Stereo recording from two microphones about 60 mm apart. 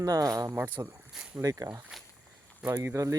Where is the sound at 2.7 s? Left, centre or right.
Right.